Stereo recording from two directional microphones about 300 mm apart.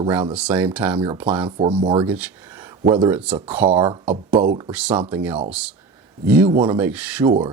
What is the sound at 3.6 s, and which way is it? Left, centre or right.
Speech, centre.